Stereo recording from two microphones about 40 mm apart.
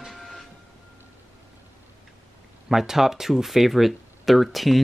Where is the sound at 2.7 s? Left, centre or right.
Centre.